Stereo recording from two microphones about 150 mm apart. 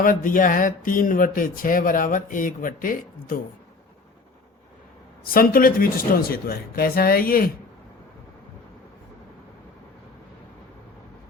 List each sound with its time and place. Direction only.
0.0 s speech: 65° left (ahead or behind)
5.2 s speech: 75° left (ahead or behind)